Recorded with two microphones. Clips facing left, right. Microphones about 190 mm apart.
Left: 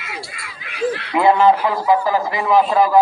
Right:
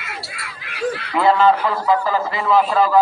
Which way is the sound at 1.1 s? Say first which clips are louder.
Left 1 dB; 15° left (ahead or behind).